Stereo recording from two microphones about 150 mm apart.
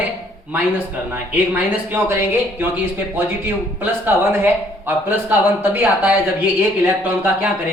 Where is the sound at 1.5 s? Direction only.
15° right (ahead or behind).